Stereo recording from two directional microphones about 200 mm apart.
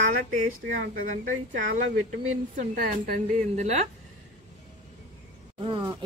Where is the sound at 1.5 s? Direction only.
45° right (ahead or behind).